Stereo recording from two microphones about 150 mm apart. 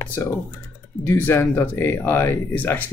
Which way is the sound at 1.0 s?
15° left (ahead or behind).